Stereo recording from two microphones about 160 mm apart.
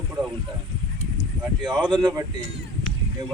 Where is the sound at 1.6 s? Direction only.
30° right (ahead or behind).